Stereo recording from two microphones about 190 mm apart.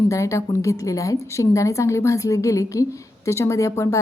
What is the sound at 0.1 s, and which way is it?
A woman's voice, 15° left (ahead or behind).